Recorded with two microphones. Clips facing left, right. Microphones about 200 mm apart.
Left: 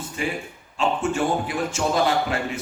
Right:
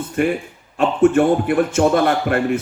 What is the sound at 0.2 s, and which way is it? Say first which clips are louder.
Speech: right 10 dB; 60° right (ahead or behind).